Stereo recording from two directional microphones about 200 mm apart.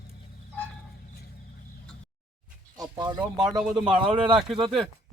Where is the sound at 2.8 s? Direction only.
20° right (ahead or behind).